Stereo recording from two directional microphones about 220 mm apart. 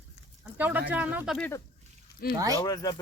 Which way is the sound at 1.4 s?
10° left (ahead or behind).